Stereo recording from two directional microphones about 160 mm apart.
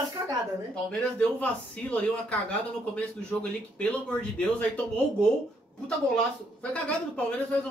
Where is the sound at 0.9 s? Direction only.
5° left (ahead or behind).